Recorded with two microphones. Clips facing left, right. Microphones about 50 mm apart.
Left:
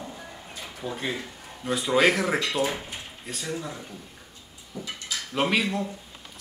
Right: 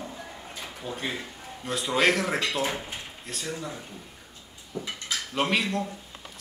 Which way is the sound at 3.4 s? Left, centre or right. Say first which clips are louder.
Left 2 dB; centre.